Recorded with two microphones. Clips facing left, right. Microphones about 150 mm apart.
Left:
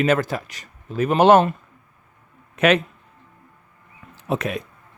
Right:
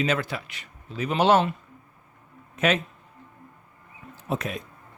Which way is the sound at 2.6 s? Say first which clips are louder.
Left 6 dB; 70° left (ahead or behind).